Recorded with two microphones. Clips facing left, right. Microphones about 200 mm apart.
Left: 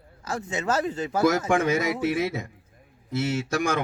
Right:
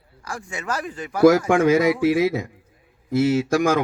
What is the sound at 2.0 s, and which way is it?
Speech, 55° right (ahead or behind).